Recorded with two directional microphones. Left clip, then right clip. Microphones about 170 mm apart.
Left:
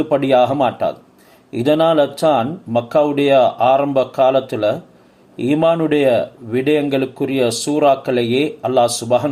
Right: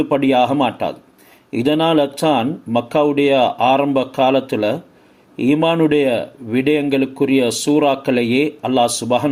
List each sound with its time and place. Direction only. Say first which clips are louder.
0.0 s speech: left 1 dB; 25° right (ahead or behind)